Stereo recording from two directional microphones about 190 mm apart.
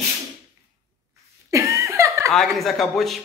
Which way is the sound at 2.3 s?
Centre (ahead or behind).